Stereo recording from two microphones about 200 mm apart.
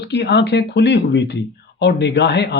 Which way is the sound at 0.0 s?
60° left (ahead or behind).